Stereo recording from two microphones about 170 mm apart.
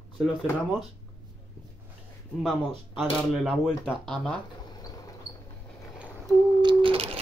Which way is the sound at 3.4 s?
5° left (ahead or behind).